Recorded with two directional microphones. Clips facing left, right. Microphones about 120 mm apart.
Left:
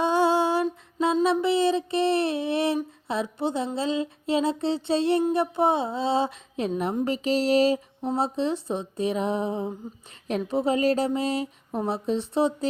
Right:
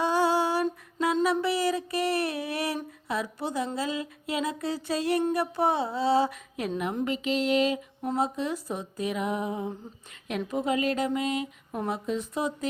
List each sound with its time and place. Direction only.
0.0 s music: 20° left (ahead or behind)
3.1 s speech: 25° left (ahead or behind)